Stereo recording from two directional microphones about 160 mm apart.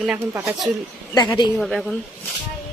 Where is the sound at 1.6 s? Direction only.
Centre (ahead or behind).